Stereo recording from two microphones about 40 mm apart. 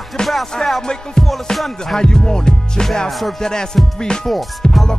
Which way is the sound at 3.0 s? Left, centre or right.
Centre.